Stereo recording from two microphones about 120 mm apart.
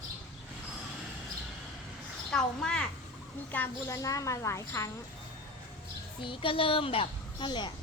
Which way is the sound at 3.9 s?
25° left (ahead or behind).